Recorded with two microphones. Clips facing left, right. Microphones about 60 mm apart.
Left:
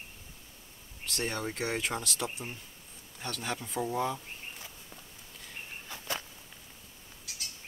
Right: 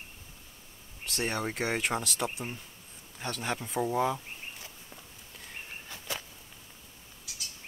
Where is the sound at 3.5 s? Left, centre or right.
Centre.